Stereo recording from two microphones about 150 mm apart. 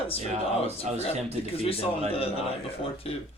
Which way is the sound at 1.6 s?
40° left (ahead or behind).